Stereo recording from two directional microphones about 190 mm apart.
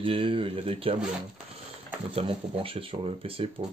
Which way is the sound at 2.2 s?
30° right (ahead or behind).